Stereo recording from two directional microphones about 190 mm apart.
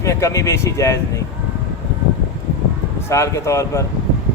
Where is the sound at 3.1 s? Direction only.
15° left (ahead or behind).